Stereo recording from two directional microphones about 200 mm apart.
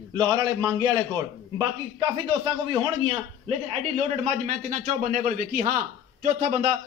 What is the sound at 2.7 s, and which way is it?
A man's voice, 25° right (ahead or behind).